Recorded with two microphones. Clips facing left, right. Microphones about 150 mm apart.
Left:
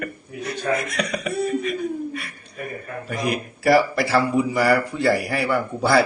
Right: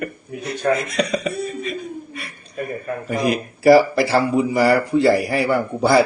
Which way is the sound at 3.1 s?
25° right (ahead or behind).